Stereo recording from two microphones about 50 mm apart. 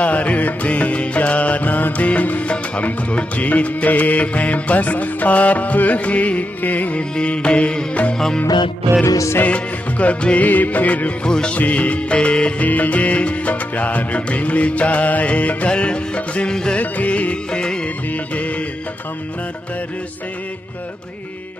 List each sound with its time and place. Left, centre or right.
0.0 s music: left
9.0 s music: left
9.4 s music: left
11.2 s music: centre
11.5 s music: left
12.6 s music: left; by 16.8 s centre
16.8 s music: left